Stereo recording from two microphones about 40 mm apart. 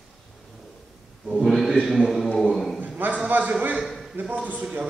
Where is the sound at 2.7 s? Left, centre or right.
Right.